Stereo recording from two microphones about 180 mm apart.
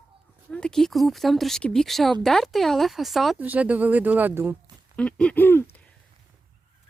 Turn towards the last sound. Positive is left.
turn(degrees=10)  # may be behind; listen again after turning